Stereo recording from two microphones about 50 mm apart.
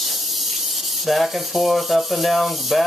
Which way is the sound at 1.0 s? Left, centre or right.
Centre.